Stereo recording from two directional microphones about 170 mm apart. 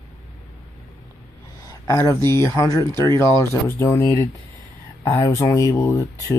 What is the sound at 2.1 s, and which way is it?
Speech, 15° left (ahead or behind).